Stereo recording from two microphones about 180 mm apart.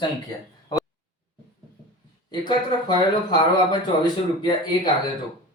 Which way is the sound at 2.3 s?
25° left (ahead or behind).